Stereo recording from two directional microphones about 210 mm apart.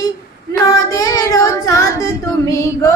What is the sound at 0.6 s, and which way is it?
Child singing, 15° left (ahead or behind).